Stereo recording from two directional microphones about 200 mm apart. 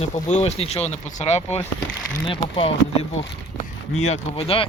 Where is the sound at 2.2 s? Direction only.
25° left (ahead or behind).